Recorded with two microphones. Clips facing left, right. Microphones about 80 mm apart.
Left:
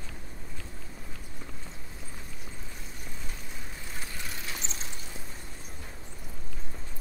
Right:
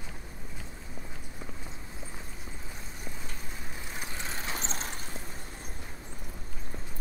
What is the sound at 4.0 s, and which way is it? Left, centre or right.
Clip-clop, right.